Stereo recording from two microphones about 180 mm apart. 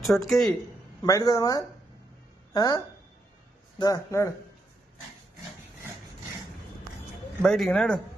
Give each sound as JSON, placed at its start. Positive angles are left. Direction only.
{"t": 0.0, "sound": "speech", "side_deg": 0}
{"t": 1.0, "sound": "speech", "side_deg": 20}
{"t": 7.4, "sound": "speech", "side_deg": 0}